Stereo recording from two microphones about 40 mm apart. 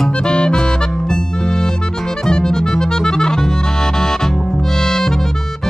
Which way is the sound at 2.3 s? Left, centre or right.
Centre.